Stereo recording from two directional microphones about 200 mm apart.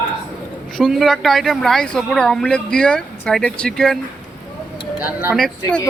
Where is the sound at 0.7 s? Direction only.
Centre (ahead or behind).